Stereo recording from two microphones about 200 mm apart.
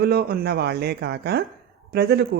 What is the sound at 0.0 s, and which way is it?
Speech, 50° right (ahead or behind).